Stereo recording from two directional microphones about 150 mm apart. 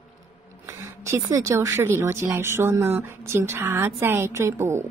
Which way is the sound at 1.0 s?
20° right (ahead or behind).